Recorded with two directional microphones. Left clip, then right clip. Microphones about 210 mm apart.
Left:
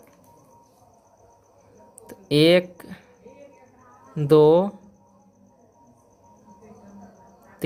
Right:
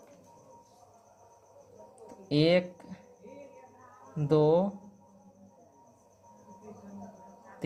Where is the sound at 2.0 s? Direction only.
40° left (ahead or behind).